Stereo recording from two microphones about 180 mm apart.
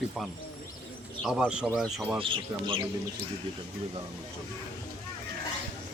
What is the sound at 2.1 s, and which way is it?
Speech, 30° right (ahead or behind).